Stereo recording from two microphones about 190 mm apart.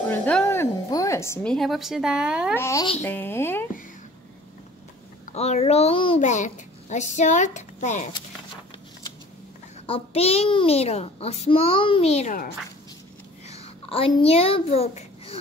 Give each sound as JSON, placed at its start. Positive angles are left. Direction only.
{"t": 0.1, "sound": "a woman's voice", "side_deg": 5}
{"t": 2.5, "sound": "speech", "side_deg": 15}
{"t": 5.2, "sound": "a child's voice", "side_deg": 35}
{"t": 9.8, "sound": "a child's voice", "side_deg": 30}
{"t": 13.5, "sound": "a child's voice", "side_deg": 30}